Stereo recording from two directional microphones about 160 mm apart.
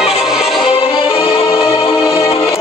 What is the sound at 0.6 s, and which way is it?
Music, 35° left (ahead or behind).